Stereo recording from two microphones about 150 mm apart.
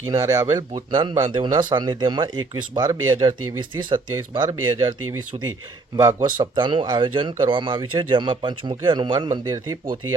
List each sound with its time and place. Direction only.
0.1 s speech: 25° right (ahead or behind)
6.0 s speech: 25° right (ahead or behind)